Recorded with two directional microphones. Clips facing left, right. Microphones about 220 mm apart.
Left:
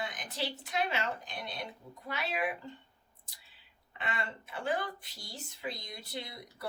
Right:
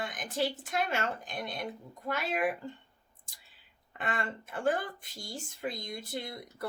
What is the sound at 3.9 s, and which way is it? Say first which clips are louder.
Speech: right 3 dB; 50° right (ahead or behind).